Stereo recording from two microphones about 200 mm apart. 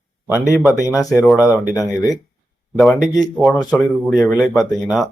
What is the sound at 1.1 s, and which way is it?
Speech, 5° right (ahead or behind).